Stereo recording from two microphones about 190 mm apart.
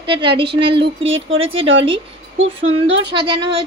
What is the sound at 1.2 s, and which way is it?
Speech, 90° right.